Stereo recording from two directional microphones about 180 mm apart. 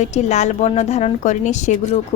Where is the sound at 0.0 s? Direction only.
40° left (ahead or behind).